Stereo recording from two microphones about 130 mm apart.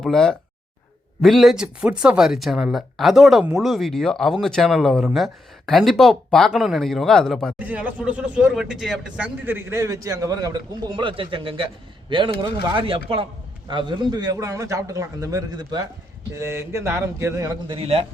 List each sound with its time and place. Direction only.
0.0 s speech: 5° left (ahead or behind)
7.6 s speech: 10° right (ahead or behind)
9.6 s a man's voice: 20° right (ahead or behind)
17.7 s a man's voice: 50° right (ahead or behind)